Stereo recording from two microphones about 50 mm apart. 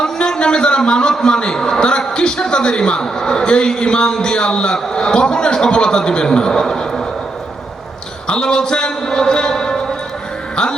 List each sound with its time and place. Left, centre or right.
0.0 s a man's voice: centre
8.3 s a man's voice: centre